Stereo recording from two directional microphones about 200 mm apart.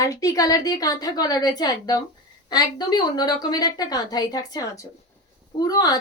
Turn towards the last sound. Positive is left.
turn(degrees=20)  # may be behind; listen again after turning